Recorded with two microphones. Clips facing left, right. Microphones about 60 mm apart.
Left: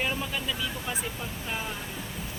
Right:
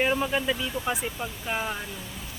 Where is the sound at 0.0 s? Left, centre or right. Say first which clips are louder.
Right 6 dB; right.